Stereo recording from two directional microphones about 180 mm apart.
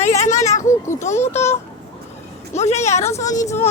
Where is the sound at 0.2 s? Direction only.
40° left (ahead or behind).